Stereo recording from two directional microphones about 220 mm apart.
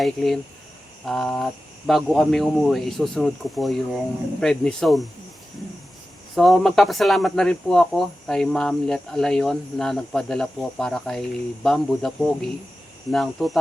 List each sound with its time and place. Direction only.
0.0 s speech: centre (ahead or behind)
6.3 s speech: centre (ahead or behind)